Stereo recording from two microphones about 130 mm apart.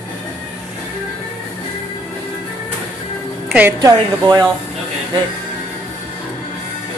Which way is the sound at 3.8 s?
30° right (ahead or behind).